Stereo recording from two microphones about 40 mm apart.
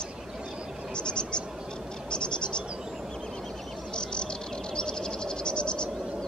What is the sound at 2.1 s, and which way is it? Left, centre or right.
Frog, left.